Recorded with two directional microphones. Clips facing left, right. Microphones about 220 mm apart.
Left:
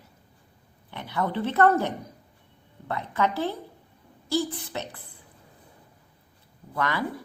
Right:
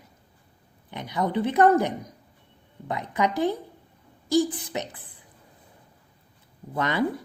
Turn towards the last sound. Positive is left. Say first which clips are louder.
# right 2 dB
turn(degrees=-20)  # may be behind; listen again after turning